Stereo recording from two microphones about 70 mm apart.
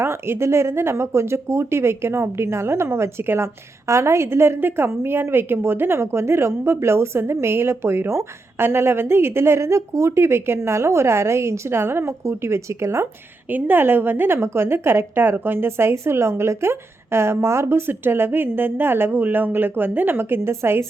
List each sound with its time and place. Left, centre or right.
0.0 s speech: right
13.5 s speech: right